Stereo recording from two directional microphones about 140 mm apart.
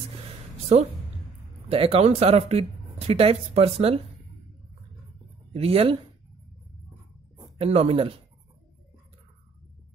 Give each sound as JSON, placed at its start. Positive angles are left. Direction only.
{"t": 1.7, "sound": "speech", "side_deg": -45}
{"t": 5.5, "sound": "speech", "side_deg": -45}
{"t": 7.3, "sound": "speech", "side_deg": -40}